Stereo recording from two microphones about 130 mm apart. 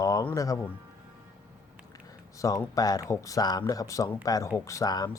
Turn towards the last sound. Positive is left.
turn(degrees=30)  # may be behind; listen again after turning